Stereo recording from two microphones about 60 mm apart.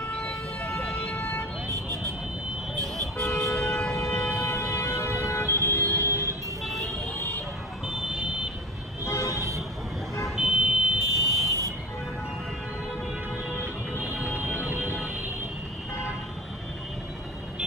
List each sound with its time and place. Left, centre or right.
0.6 s music: left
0.8 s a sound: left
1.7 s vehicle: right
3.3 s vehicle: left
3.6 s a sound: centre
4.4 s vehicle: left
6.6 s vehicle: centre
7.8 s car alarm: centre
9.0 s vehicle: left
10.2 s vehicle: centre
11.1 s vehicle: right
13.9 s music: right